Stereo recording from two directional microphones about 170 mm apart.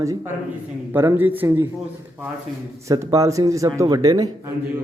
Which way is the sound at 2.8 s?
20° right (ahead or behind).